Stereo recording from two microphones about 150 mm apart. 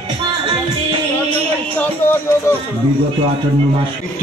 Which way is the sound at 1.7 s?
15° left (ahead or behind).